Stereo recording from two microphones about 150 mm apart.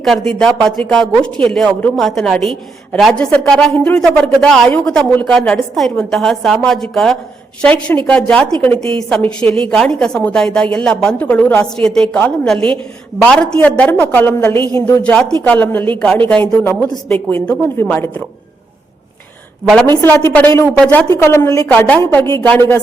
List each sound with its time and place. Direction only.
0.0 s a woman's voice: 5° left (ahead or behind)
12.5 s a woman's voice: 35° right (ahead or behind)
13.2 s a woman's voice: 10° left (ahead or behind)
19.6 s speech: 5° left (ahead or behind)
20.2 s a woman's voice: 15° left (ahead or behind)